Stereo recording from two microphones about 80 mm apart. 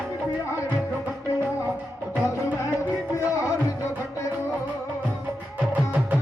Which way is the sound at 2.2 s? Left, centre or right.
Left.